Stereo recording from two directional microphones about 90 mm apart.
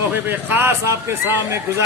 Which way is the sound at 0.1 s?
20° right (ahead or behind).